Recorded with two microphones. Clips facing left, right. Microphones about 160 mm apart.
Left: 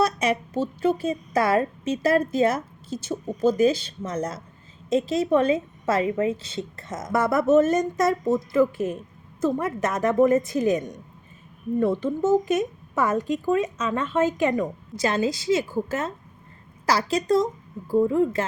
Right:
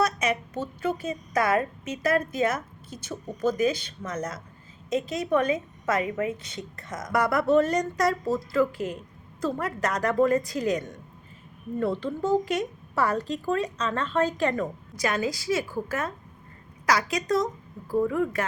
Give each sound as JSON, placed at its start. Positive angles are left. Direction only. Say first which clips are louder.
{"t": 0.0, "sound": "a woman's voice", "louder": "left 3 dB", "side_deg": 30}
{"t": 11.9, "sound": "speech", "louder": "left 4 dB", "side_deg": 5}
{"t": 12.3, "sound": "speech", "louder": "left 3 dB", "side_deg": 20}
{"t": 14.9, "sound": "a woman's voice", "louder": "left 4 dB", "side_deg": 25}